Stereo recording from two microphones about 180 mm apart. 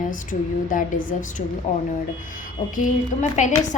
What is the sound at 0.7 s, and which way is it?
Speech, 50° left (ahead or behind).